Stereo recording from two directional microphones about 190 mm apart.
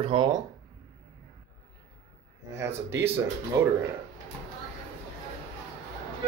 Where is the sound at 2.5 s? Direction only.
15° right (ahead or behind).